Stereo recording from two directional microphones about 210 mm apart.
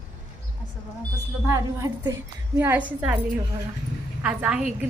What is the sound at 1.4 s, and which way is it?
A woman's voice, 15° right (ahead or behind).